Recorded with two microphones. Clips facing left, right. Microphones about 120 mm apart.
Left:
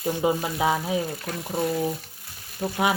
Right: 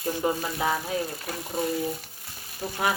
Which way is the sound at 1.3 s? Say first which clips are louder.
Left 2 dB; 5° right (ahead or behind).